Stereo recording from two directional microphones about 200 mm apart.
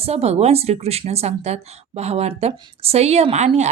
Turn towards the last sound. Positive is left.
turn(degrees=-35)  # may be behind; listen again after turning